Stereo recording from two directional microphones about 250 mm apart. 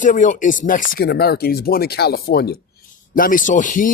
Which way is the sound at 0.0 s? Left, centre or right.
Left.